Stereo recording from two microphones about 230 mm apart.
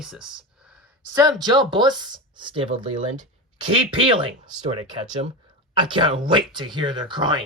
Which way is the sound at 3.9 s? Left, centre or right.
Right.